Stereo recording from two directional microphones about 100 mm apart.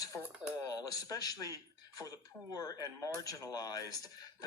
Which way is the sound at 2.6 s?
35° left (ahead or behind).